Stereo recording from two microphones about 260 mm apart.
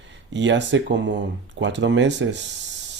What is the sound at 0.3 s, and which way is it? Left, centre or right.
Speech, right.